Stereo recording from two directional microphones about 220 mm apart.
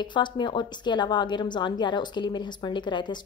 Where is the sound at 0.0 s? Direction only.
20° left (ahead or behind).